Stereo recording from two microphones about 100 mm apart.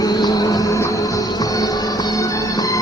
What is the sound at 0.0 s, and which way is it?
Music, 40° left (ahead or behind).